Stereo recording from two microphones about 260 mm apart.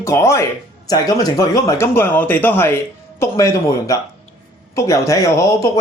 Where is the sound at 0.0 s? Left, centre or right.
Centre.